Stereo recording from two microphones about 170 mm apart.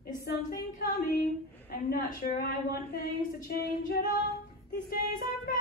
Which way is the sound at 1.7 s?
60° left (ahead or behind).